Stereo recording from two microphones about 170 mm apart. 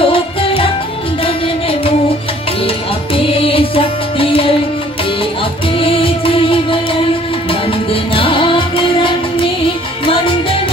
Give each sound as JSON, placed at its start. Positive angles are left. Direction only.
{"t": 0.0, "sound": "music", "side_deg": 30}
{"t": 3.2, "sound": "music", "side_deg": 35}
{"t": 5.8, "sound": "music", "side_deg": 30}
{"t": 7.9, "sound": "music", "side_deg": 30}